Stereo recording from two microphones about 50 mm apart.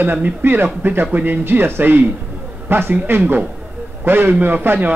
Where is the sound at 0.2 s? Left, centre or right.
Right.